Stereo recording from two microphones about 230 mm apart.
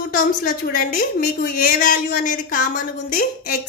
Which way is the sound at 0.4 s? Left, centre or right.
Left.